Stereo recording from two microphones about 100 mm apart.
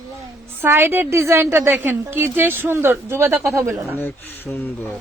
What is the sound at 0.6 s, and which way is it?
Speech, 20° right (ahead or behind).